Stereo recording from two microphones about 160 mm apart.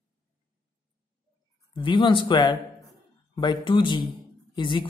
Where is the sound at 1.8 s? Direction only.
30° left (ahead or behind).